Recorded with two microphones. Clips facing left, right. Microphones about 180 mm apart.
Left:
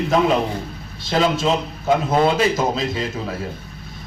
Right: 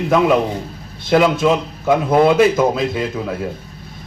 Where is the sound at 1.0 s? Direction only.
55° right (ahead or behind).